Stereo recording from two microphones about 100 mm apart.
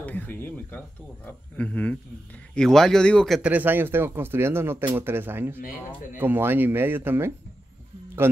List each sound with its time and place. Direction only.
0.0 s speech: 15° left (ahead or behind)
3.4 s speech: 20° right (ahead or behind)